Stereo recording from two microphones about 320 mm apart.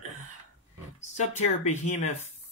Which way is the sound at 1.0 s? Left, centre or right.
Left.